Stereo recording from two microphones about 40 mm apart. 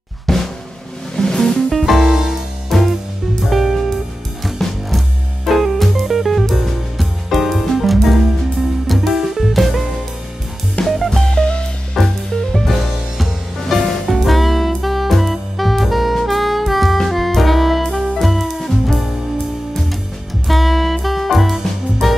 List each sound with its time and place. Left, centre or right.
0.3 s drum: centre
1.1 s music: centre
2.0 s music: centre
2.7 s music: centre
11.1 s music: centre
12.0 s music: centre
20.4 s music: centre